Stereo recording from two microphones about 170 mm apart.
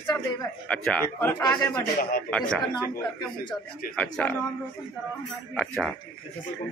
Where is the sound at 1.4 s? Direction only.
25° left (ahead or behind).